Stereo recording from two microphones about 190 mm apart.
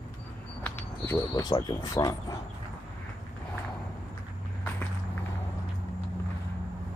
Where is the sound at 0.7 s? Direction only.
10° left (ahead or behind).